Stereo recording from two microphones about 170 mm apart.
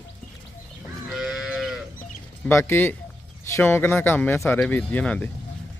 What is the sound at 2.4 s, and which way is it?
Speech, 10° left (ahead or behind).